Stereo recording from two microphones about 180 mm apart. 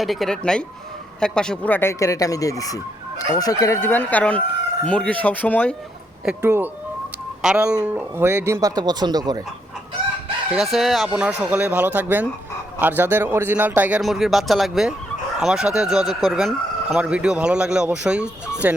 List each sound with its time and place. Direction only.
0.0 s speech: centre (ahead or behind)
6.4 s speech: 15° right (ahead or behind)
10.5 s speech: centre (ahead or behind)